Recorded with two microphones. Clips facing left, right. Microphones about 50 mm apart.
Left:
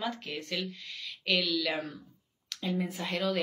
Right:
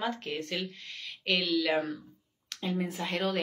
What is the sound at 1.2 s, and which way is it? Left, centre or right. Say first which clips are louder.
Speech: right 1 dB; right.